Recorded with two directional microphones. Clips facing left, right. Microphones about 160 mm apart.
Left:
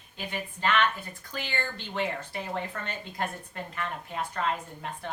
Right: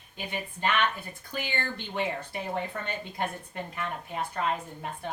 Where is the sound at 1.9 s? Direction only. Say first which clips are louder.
Even; 15° right (ahead or behind).